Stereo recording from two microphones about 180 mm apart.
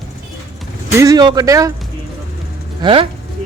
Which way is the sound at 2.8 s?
30° right (ahead or behind).